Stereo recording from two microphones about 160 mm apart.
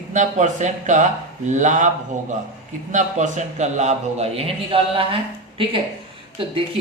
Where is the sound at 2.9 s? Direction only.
50° right (ahead or behind).